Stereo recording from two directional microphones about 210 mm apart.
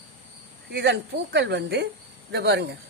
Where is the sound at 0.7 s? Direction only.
55° right (ahead or behind).